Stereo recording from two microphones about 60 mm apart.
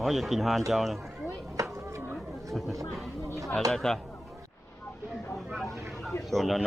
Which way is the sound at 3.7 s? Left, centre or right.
Centre.